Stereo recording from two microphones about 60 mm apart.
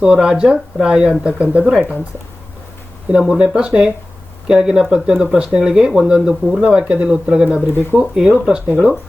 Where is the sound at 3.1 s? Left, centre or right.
Centre.